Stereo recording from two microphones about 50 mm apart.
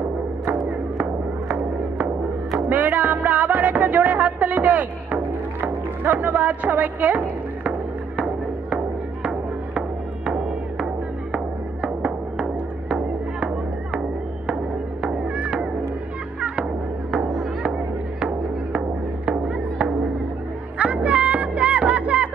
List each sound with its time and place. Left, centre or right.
2.7 s music: right
8.2 s music: right
14.5 s music: centre
18.2 s music: centre
20.7 s a sound: right